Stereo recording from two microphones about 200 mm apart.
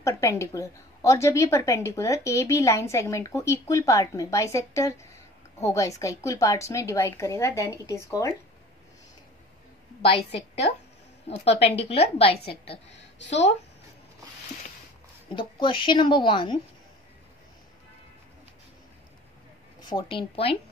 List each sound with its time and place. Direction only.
0.1 s a woman's voice: 15° left (ahead or behind)
10.0 s a woman's voice: 30° left (ahead or behind)
12.9 s a woman's voice: 65° left (ahead or behind)
15.3 s speech: 25° left (ahead or behind)
19.8 s speech: 25° left (ahead or behind)